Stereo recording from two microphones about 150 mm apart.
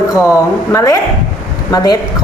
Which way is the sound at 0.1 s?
20° left (ahead or behind).